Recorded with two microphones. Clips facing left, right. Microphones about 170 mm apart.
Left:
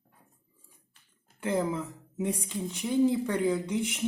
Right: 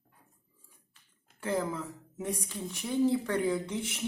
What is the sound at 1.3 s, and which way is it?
A woman's voice, 20° left (ahead or behind).